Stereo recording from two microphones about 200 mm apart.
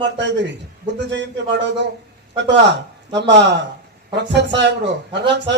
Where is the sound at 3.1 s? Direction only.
60° right (ahead or behind).